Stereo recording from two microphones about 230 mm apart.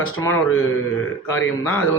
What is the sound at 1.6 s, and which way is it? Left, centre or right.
Speech, centre.